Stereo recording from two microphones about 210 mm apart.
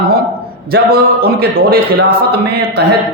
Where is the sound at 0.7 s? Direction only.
45° right (ahead or behind).